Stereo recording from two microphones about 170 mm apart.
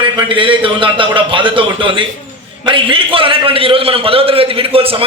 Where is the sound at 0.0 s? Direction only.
30° right (ahead or behind).